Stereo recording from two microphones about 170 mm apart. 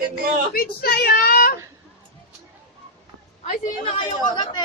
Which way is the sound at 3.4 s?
50° left (ahead or behind).